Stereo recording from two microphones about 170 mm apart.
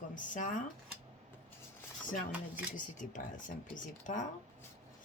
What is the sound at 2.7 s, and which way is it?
Speech, 50° left (ahead or behind).